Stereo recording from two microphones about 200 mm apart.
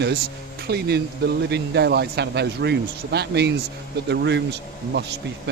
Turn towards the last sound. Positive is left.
turn(degrees=-55)  # may be behind; listen again after turning